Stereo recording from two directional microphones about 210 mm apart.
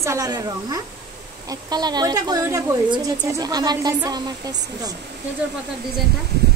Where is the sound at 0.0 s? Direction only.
15° right (ahead or behind).